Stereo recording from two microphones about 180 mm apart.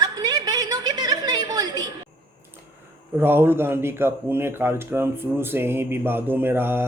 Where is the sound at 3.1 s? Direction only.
10° right (ahead or behind).